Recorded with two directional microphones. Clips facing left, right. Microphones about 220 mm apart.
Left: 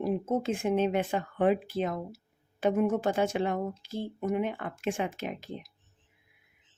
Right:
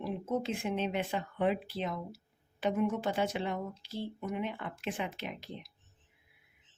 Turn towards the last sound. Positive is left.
turn(degrees=45)  # may be behind; listen again after turning